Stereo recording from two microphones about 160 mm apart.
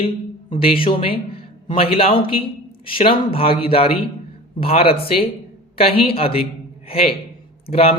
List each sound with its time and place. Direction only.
0.5 s a man's voice: 35° left (ahead or behind)